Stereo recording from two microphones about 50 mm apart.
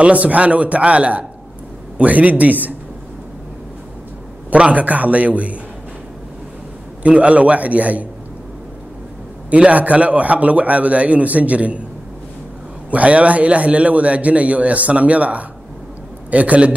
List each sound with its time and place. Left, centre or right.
0.0 s a man's voice: right
4.5 s a man's voice: right
7.0 s a man's voice: right
9.5 s a man's voice: right
12.9 s a man's voice: right